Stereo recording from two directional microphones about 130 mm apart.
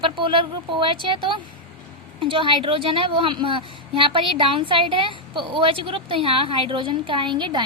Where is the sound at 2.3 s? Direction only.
40° right (ahead or behind).